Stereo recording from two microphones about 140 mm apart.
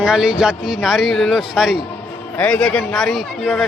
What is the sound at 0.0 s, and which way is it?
Speech, 5° right (ahead or behind).